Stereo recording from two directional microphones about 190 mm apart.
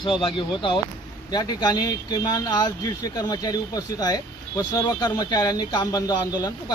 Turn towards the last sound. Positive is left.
turn(degrees=20)  # may be behind; listen again after turning